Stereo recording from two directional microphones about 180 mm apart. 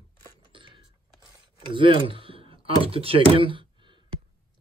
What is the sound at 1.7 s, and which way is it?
Speech, 30° right (ahead or behind).